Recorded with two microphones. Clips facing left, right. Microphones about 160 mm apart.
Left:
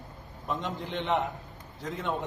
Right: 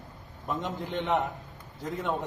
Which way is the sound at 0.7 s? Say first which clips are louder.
Right 2 dB; 45° right (ahead or behind).